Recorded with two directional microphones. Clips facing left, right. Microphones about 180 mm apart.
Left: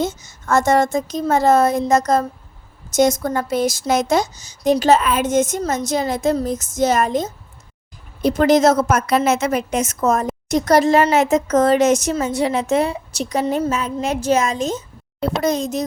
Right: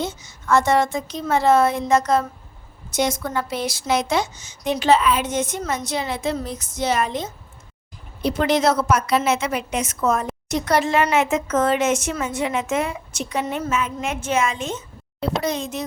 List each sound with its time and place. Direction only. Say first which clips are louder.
0.0 s a woman's voice: left 5 dB; 45° left (ahead or behind)